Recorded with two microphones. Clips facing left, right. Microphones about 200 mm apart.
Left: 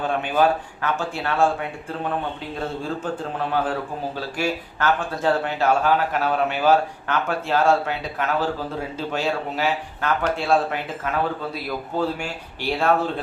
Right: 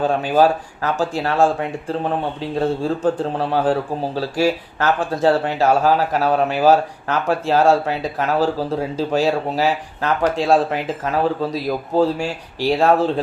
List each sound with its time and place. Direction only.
0.2 s a man's voice: 35° right (ahead or behind)
2.6 s a man's voice: 35° right (ahead or behind)